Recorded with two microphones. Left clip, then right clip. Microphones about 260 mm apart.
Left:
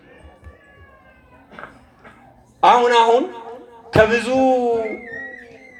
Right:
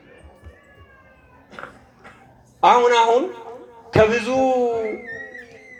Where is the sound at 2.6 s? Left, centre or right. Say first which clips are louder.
Left 1 dB; left.